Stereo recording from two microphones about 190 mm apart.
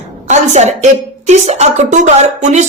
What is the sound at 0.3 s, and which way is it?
A woman's voice, 40° right (ahead or behind).